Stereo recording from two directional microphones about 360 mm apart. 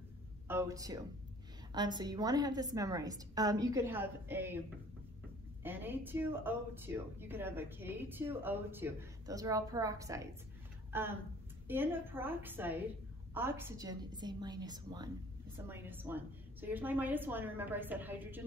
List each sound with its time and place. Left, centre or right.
0.5 s a woman's voice: centre
5.6 s a woman's voice: centre